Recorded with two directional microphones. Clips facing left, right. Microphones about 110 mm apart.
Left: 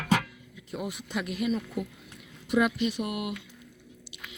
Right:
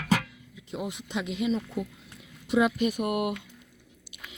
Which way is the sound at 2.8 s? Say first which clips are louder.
Right 3 dB; 50° right (ahead or behind).